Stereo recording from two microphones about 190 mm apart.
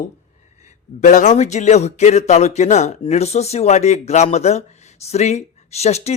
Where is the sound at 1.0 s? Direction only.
40° left (ahead or behind).